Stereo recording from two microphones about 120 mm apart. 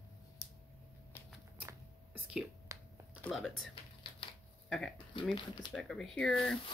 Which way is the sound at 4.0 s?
45° left (ahead or behind).